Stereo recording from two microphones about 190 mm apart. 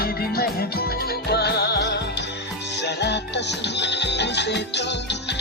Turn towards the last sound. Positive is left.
turn(degrees=65)  # may be behind; listen again after turning